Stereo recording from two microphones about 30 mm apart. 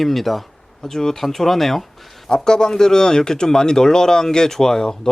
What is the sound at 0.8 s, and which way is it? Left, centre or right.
Speech, centre.